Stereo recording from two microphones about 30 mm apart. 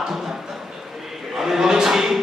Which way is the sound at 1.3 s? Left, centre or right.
Centre.